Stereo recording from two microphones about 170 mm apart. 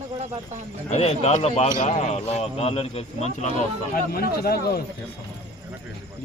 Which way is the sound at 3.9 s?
60° left (ahead or behind).